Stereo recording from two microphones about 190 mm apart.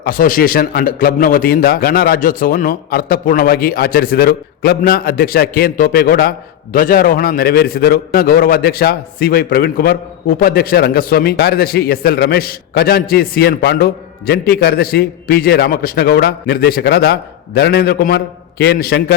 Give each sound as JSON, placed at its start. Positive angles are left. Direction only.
{"t": 0.0, "sound": "a man's voice", "side_deg": 45}